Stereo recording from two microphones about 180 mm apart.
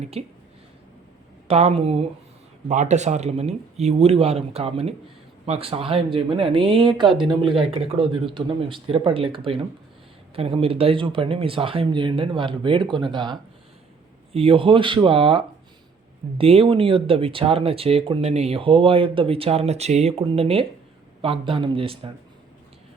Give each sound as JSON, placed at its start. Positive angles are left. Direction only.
{"t": 0.0, "sound": "speech", "side_deg": -35}
{"t": 1.5, "sound": "speech", "side_deg": -35}